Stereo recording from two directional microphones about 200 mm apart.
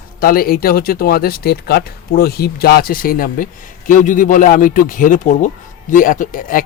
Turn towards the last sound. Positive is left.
turn(degrees=40)  # may be behind; listen again after turning